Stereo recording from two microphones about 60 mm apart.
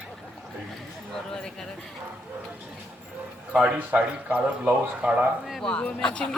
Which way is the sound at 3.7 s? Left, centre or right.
Right.